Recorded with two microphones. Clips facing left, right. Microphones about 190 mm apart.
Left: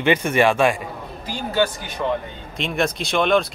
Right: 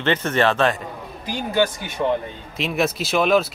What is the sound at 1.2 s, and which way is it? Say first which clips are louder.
Speech: right 1 dB; 15° right (ahead or behind).